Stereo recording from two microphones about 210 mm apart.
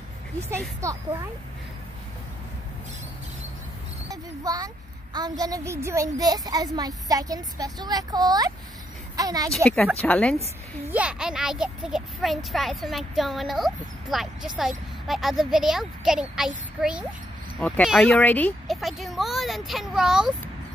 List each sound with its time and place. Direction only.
0.8 s a child's voice: 15° right (ahead or behind)
4.1 s a sound: 15° right (ahead or behind)
5.1 s a child's voice: 20° right (ahead or behind)
10.0 s a woman's voice: 5° left (ahead or behind)
10.9 s a child's voice: 5° right (ahead or behind)